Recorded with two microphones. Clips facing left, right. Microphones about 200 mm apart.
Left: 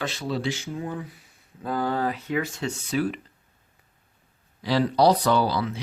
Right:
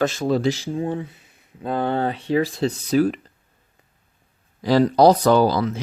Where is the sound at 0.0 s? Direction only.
45° right (ahead or behind).